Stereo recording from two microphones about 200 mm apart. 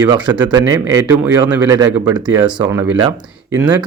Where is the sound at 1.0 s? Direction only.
10° right (ahead or behind).